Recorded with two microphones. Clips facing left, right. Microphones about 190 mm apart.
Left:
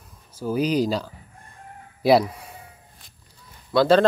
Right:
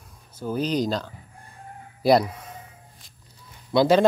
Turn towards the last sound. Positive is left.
turn(degrees=-15)  # may be behind; listen again after turning